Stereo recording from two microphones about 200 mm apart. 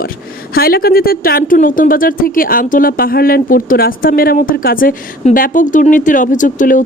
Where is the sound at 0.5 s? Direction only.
50° left (ahead or behind).